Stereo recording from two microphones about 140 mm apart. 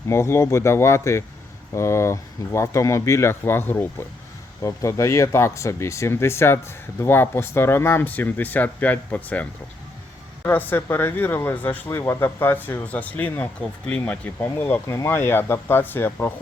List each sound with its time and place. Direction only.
0.1 s speech: 20° left (ahead or behind)